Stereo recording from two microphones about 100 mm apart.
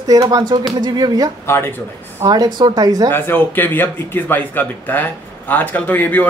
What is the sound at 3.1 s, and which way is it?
Speech, 20° left (ahead or behind).